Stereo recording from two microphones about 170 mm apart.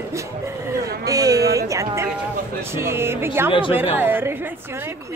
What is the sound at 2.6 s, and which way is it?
A woman's voice, 15° right (ahead or behind).